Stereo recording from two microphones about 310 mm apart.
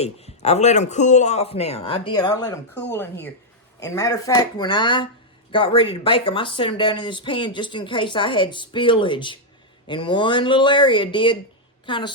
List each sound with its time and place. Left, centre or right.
0.0 s a man's voice: centre